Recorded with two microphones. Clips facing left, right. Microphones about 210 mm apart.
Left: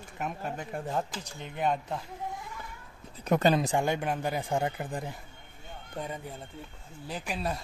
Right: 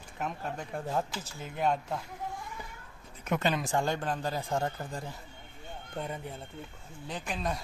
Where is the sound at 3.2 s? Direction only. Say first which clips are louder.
Left 6 dB; 40° left (ahead or behind).